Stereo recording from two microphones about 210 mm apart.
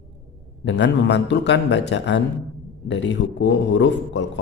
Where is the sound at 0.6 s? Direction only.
55° left (ahead or behind).